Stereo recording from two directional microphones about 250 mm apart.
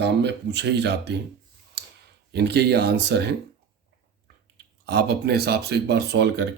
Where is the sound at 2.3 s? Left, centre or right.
Right.